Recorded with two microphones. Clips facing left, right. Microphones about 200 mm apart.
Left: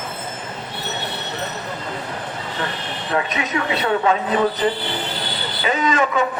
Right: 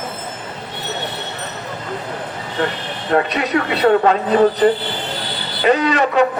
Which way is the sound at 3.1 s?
35° right (ahead or behind).